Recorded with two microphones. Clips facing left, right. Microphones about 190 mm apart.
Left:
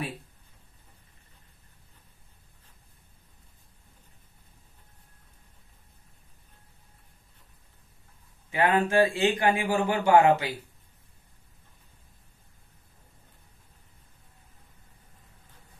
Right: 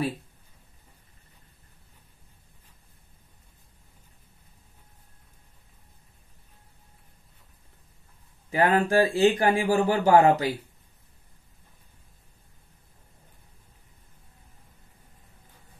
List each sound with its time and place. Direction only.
8.5 s speech: 35° right (ahead or behind)